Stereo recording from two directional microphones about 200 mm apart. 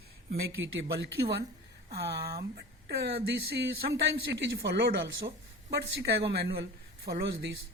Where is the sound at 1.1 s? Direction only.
50° right (ahead or behind).